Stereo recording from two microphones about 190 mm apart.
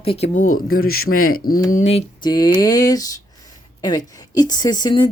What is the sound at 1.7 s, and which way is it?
Speech, 35° left (ahead or behind).